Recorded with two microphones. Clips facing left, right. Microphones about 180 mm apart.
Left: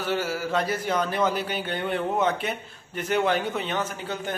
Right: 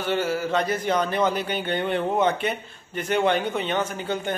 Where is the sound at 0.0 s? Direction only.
5° left (ahead or behind).